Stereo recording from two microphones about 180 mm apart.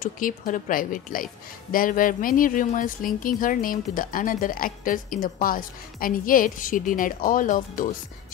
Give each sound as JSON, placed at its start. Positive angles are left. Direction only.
{"t": 0.0, "sound": "a woman's voice", "side_deg": 50}